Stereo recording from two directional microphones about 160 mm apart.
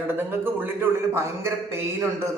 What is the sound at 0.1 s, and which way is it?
A man's voice, 15° right (ahead or behind).